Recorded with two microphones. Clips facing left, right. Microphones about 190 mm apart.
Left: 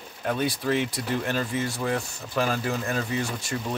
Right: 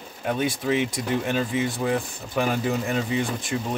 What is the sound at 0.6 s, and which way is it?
Speech, 15° right (ahead or behind).